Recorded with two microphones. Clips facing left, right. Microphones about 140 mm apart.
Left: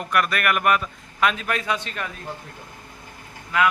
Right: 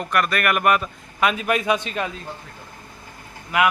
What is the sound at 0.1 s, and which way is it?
A man's voice, centre (ahead or behind).